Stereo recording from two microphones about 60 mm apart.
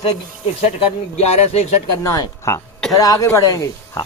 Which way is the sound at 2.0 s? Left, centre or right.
Left.